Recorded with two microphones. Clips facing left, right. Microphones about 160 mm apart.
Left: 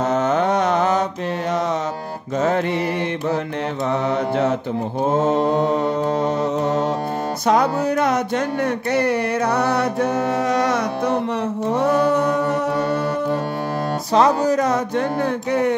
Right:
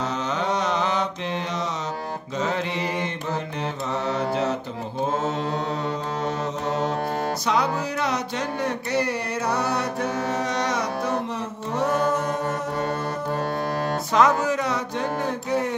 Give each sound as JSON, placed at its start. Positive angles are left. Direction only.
{"t": 0.0, "sound": "mantra", "side_deg": 50}
{"t": 2.4, "sound": "music", "side_deg": 55}
{"t": 7.4, "sound": "speech", "side_deg": 50}
{"t": 8.6, "sound": "music", "side_deg": 60}
{"t": 11.7, "sound": "mantra", "side_deg": 60}
{"t": 14.1, "sound": "speech", "side_deg": 35}